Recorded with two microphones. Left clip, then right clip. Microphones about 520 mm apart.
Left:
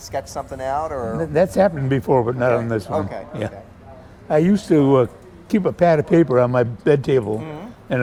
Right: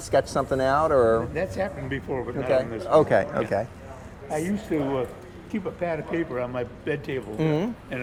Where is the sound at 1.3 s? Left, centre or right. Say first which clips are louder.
Left 12 dB; left.